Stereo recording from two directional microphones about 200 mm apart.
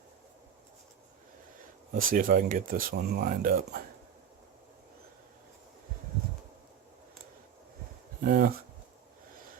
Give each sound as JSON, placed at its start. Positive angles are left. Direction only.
{"t": 1.9, "sound": "speech", "side_deg": -45}
{"t": 8.2, "sound": "speech", "side_deg": -45}